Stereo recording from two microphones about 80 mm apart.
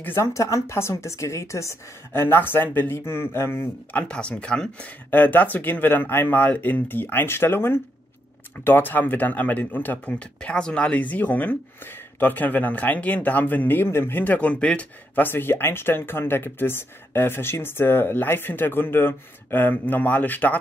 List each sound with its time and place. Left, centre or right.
0.0 s speech: left
3.9 s speech: centre